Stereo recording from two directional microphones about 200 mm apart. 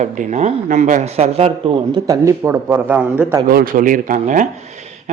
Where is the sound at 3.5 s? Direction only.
45° right (ahead or behind).